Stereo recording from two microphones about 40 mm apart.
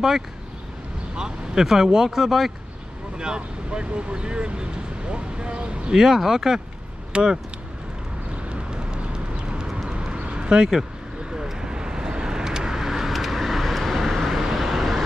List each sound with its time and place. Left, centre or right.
1.1 s speech: centre
3.2 s speech: right
5.9 s speech: centre
7.1 s vehicle: right
8.5 s vehicle: right
9.8 s a sound: right
11.3 s vehicle: centre